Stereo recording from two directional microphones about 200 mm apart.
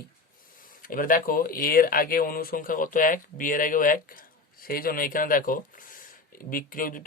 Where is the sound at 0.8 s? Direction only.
45° left (ahead or behind).